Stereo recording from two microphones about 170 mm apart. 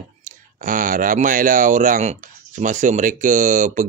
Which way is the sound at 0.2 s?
55° right (ahead or behind).